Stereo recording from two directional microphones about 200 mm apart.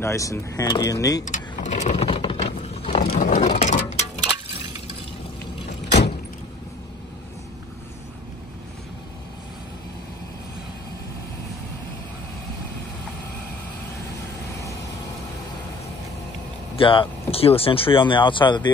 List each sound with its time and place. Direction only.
0.0 s speech: 15° left (ahead or behind)
1.2 s sewing machine: 35° left (ahead or behind)
3.1 s a sound: 40° left (ahead or behind)
5.9 s vehicle: 55° left (ahead or behind)
16.7 s speech: 25° left (ahead or behind)